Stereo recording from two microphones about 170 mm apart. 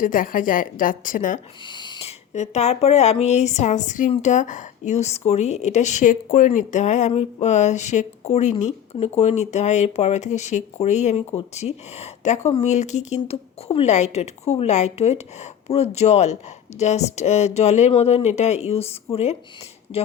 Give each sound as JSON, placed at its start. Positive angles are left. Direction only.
{"t": 0.0, "sound": "a woman's voice", "side_deg": 55}
{"t": 1.6, "sound": "speech", "side_deg": 25}